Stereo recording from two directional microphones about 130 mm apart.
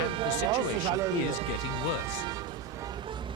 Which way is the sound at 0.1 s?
40° right (ahead or behind).